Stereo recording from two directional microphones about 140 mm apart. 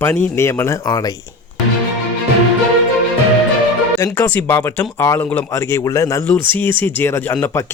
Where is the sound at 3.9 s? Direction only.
15° left (ahead or behind).